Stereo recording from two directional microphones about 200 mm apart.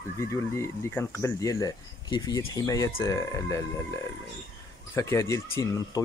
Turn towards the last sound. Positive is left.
turn(degrees=15)  # may be behind; listen again after turning